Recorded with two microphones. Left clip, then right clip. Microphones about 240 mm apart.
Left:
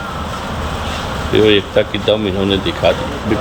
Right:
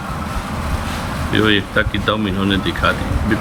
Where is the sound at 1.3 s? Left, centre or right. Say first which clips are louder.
Left 4 dB; centre.